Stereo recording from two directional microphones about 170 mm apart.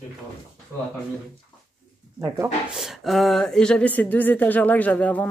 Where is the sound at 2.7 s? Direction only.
Centre (ahead or behind).